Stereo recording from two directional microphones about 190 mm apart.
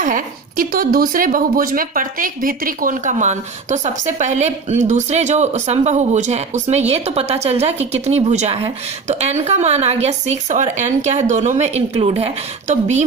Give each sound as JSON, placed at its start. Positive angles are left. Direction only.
{"t": 0.0, "sound": "a woman's voice", "side_deg": -45}